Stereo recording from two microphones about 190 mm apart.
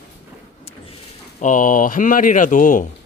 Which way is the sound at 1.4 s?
45° left (ahead or behind).